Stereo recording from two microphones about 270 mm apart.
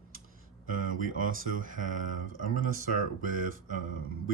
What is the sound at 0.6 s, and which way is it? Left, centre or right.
Speech, right.